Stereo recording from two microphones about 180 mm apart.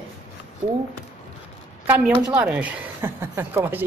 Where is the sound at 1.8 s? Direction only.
10° right (ahead or behind).